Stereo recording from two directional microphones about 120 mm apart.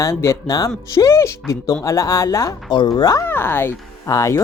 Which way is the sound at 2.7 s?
40° left (ahead or behind).